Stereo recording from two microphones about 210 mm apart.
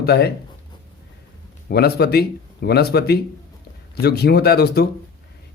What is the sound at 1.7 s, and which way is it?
Speech, 50° left (ahead or behind).